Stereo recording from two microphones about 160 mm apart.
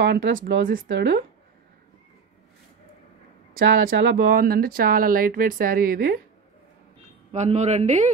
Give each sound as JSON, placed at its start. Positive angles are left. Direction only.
{"t": 0.0, "sound": "speech", "side_deg": -90}
{"t": 3.5, "sound": "speech", "side_deg": -60}
{"t": 7.3, "sound": "speech", "side_deg": -45}